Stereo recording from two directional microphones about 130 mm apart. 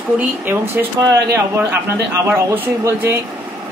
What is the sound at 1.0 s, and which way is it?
Speech, 25° right (ahead or behind).